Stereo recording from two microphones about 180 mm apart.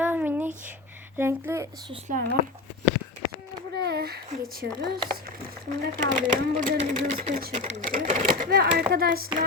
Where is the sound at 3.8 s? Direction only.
65° right (ahead or behind).